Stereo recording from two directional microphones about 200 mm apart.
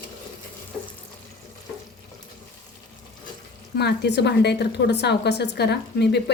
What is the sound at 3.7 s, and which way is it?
A woman's voice, 55° left (ahead or behind).